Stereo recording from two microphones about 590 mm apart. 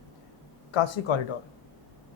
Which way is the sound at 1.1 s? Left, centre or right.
Left.